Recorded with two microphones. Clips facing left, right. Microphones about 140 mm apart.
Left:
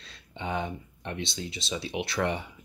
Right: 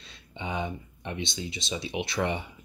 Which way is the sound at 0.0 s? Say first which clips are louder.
Left 1 dB; centre (ahead or behind).